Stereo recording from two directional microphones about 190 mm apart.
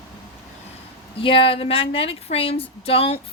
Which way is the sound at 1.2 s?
25° left (ahead or behind).